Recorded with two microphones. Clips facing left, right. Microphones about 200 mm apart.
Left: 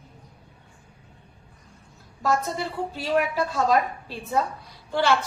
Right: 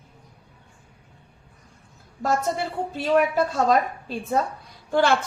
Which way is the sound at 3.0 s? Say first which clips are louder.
Right 4 dB; 50° right (ahead or behind).